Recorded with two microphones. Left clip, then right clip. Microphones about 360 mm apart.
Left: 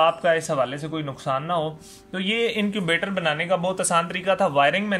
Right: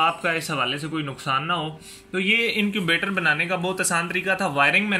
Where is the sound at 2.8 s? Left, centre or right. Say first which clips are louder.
Right 1 dB; centre.